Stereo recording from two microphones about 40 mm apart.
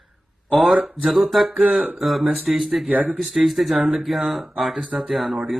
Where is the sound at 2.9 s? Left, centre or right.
Right.